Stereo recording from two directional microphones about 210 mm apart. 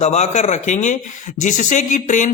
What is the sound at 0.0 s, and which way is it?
A man's voice, 30° left (ahead or behind).